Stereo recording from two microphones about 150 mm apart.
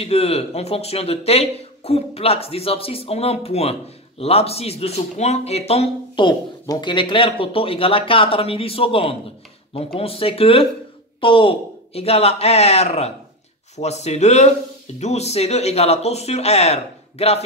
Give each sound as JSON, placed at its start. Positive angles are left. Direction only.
{"t": 0.0, "sound": "speech", "side_deg": 45}